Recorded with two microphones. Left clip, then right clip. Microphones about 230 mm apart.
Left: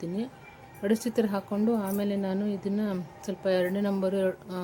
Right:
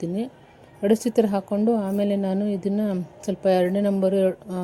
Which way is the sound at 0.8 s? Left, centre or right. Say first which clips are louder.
Right 7 dB; centre.